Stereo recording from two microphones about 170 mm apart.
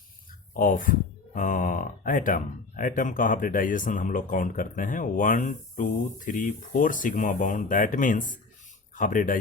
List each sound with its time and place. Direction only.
0.5 s speech: 55° left (ahead or behind)